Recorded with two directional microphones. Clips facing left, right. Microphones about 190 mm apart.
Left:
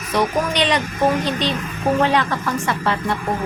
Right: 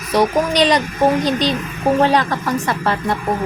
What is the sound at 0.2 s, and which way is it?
Speech, 35° right (ahead or behind).